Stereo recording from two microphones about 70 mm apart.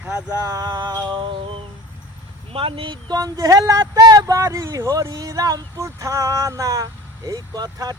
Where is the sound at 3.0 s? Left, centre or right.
Right.